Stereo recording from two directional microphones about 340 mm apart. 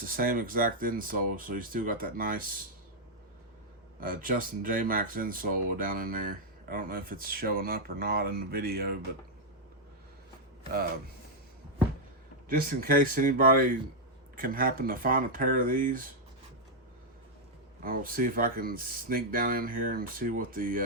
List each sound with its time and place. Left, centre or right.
0.0 s speech: right
4.0 s speech: right
12.5 s speech: right
17.8 s speech: right